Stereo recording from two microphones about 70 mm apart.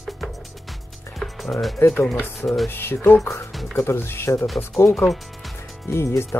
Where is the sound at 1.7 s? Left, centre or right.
Left.